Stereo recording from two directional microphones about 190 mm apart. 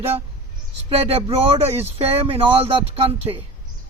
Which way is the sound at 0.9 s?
30° right (ahead or behind).